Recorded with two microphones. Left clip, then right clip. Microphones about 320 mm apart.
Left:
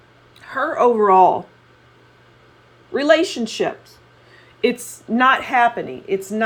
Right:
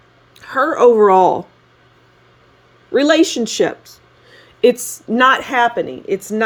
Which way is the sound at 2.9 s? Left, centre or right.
Right.